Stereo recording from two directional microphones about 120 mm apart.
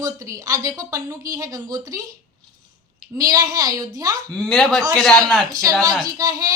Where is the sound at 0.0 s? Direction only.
30° right (ahead or behind).